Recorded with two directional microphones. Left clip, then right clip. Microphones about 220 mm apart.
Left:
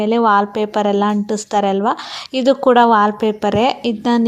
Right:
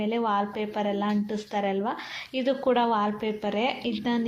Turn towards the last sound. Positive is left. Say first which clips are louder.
# left 11 dB
turn(degrees=45)  # may be behind; listen again after turning